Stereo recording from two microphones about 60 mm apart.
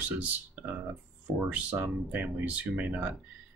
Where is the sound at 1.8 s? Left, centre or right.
Right.